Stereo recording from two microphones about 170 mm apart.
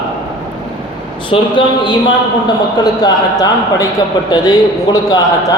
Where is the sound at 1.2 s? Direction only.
30° left (ahead or behind).